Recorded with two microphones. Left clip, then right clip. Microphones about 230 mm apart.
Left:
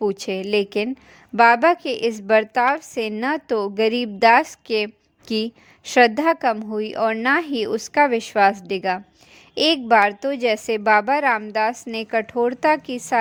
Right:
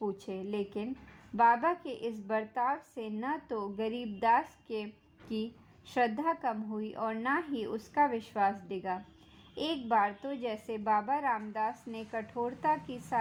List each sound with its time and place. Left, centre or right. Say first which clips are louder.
0.0 s a woman's voice: left 14 dB; left